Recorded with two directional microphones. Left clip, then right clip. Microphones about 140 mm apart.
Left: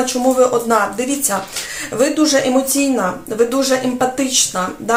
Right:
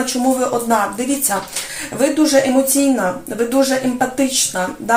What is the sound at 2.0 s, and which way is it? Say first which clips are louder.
Speech: even; 25° left (ahead or behind).